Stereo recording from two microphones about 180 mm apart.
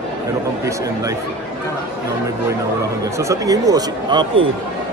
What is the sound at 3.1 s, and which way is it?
Speech, 15° right (ahead or behind).